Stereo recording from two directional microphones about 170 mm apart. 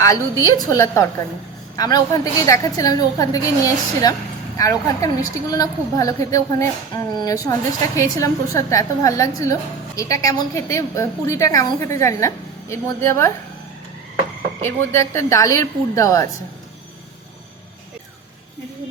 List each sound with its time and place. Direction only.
0.0 s a woman's voice: 20° left (ahead or behind)
14.6 s a woman's voice: 15° left (ahead or behind)